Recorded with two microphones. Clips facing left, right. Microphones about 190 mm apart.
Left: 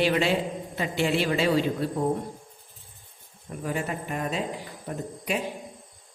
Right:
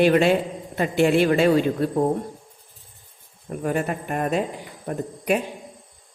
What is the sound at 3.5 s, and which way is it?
A man's voice, 55° right (ahead or behind).